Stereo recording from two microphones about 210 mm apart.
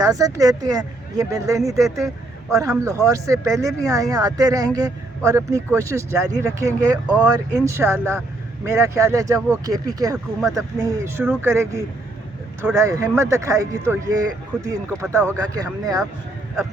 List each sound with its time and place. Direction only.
0.0 s speech: 15° right (ahead or behind)